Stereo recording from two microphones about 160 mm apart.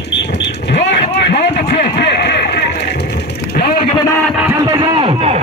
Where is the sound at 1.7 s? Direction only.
90° left.